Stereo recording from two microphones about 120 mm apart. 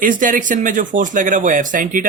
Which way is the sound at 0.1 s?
90° right.